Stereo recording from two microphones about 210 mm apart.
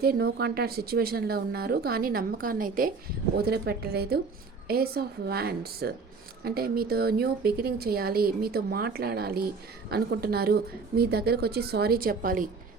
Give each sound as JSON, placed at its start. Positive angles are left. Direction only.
{"t": 0.0, "sound": "speech", "side_deg": -45}